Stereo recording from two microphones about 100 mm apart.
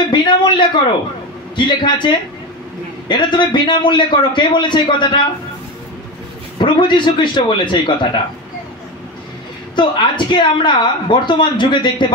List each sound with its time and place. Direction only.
0.1 s a sound: 50° left (ahead or behind)
1.6 s a woman's voice: 50° left (ahead or behind)
6.6 s a woman's voice: 55° left (ahead or behind)
9.8 s a woman's voice: 50° left (ahead or behind)